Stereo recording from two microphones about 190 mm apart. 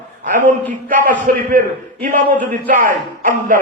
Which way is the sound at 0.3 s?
45° right (ahead or behind).